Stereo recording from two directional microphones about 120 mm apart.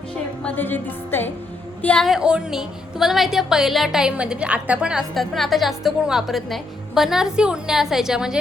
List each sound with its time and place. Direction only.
0.4 s a woman's voice: 15° left (ahead or behind)
2.0 s a woman's voice: 5° right (ahead or behind)